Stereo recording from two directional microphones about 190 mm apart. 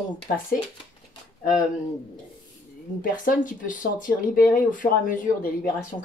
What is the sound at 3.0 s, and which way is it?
Speech, 45° left (ahead or behind).